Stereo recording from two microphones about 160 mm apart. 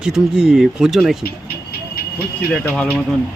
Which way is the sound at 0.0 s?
5° right (ahead or behind).